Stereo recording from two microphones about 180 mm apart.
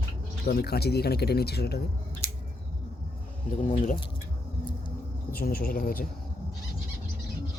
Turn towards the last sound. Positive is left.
turn(degrees=55)  # may be behind; listen again after turning